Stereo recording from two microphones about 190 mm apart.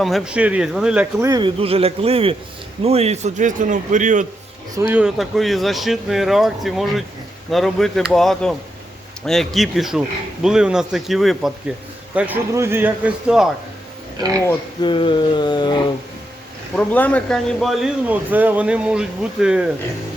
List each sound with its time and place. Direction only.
0.0 s speech: centre (ahead or behind)
1.2 s a man's voice: 20° right (ahead or behind); by 4.3 s 40° right (ahead or behind)
4.8 s a man's voice: 10° right (ahead or behind)
14.8 s a sound: 25° left (ahead or behind)
16.7 s speech: 5° left (ahead or behind)